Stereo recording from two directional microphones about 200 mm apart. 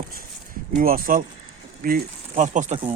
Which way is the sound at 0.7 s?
45° right (ahead or behind).